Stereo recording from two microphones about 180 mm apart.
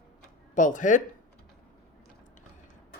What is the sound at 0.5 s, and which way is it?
Speech, 45° left (ahead or behind).